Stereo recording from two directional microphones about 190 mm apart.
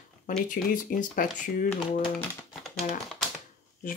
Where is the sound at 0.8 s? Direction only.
45° left (ahead or behind).